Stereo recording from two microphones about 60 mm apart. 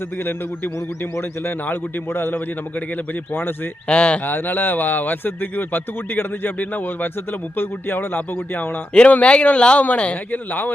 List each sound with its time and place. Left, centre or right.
1.6 s speech: left
3.8 s speech: centre
4.3 s speech: left
8.9 s speech: left
10.3 s speech: left